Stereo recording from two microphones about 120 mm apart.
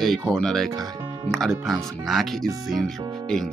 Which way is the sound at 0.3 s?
Centre (ahead or behind).